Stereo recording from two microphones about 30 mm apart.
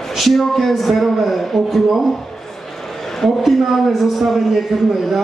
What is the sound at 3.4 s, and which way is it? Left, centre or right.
A man's voice, centre.